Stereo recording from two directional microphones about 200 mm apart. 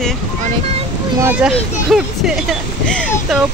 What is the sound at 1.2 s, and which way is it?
Speech, 5° right (ahead or behind).